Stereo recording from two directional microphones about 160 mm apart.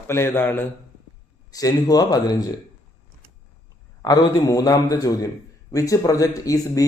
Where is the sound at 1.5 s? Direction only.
25° left (ahead or behind).